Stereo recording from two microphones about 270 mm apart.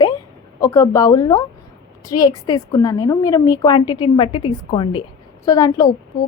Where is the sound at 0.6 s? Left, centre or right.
Centre.